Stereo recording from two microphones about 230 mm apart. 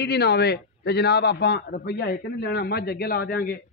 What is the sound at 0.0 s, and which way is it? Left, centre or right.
A man's voice, left.